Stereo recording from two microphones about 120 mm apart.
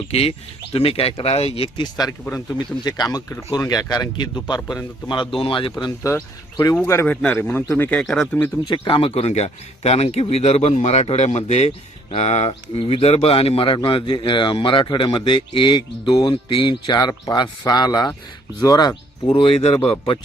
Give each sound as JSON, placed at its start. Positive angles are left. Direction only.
{"t": 0.1, "sound": "a man's voice", "side_deg": 55}
{"t": 6.1, "sound": "speech", "side_deg": 25}
{"t": 8.6, "sound": "a man's voice", "side_deg": 40}
{"t": 19.3, "sound": "speech", "side_deg": 50}